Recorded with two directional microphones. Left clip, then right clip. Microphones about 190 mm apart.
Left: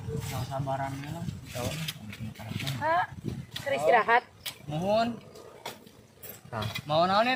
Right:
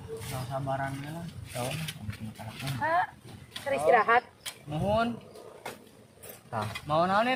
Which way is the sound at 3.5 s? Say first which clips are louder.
Even; 5° left (ahead or behind).